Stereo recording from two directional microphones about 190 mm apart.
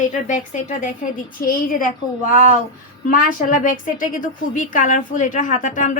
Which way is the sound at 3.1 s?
45° left (ahead or behind).